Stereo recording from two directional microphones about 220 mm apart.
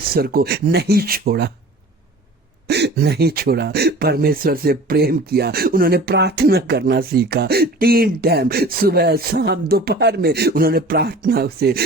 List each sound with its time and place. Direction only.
0.1 s speech: 45° right (ahead or behind)
2.6 s speech: 50° right (ahead or behind)